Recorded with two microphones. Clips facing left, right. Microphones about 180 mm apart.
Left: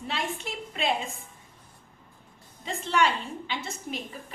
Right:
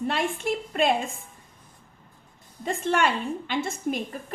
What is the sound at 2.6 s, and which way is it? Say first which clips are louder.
A woman's voice: right 2 dB; 50° right (ahead or behind).